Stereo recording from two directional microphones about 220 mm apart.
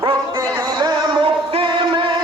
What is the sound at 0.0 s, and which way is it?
Music, 15° right (ahead or behind).